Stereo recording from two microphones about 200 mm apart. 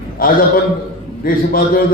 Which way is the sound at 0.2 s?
45° left (ahead or behind).